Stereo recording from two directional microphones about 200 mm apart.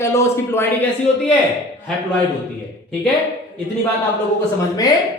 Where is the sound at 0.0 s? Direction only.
10° left (ahead or behind).